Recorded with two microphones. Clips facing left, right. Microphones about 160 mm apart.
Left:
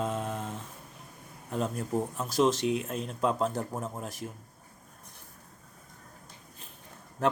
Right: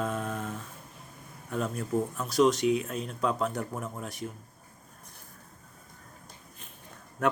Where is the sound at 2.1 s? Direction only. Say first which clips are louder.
Right 2 dB; 30° left (ahead or behind).